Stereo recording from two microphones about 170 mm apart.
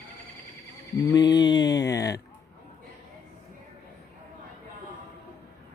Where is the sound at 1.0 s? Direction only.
20° left (ahead or behind).